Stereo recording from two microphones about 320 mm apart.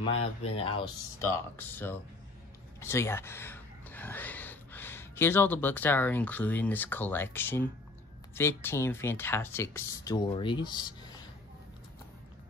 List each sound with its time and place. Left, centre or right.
0.0 s speech: centre